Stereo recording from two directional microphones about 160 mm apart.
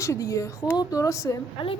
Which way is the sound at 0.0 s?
20° left (ahead or behind).